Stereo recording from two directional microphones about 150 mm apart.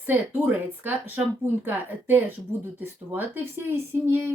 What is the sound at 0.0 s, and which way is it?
Speech, 10° right (ahead or behind).